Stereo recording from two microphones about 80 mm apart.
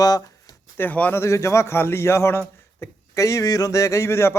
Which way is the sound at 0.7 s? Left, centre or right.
Left.